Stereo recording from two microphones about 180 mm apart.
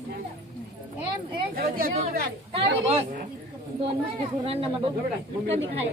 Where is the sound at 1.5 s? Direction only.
55° right (ahead or behind).